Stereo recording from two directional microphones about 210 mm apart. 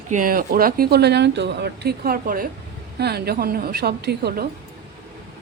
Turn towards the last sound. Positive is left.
turn(degrees=-50)  # may be behind; listen again after turning